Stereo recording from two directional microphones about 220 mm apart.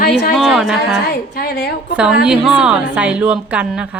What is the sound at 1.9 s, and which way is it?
A woman's voice, 5° right (ahead or behind).